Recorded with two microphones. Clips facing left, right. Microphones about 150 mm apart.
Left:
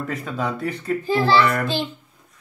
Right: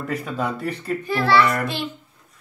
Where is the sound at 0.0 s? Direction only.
Centre (ahead or behind).